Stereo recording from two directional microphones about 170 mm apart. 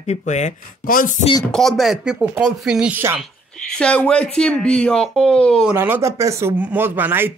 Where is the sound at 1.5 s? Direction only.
Centre (ahead or behind).